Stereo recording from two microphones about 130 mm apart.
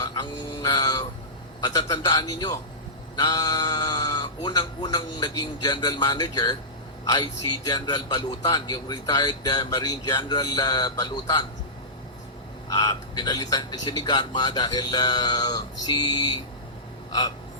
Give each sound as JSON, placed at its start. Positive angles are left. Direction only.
{"t": 0.0, "sound": "a sound", "side_deg": 30}
{"t": 1.6, "sound": "a man's voice", "side_deg": 35}
{"t": 12.6, "sound": "a man's voice", "side_deg": 30}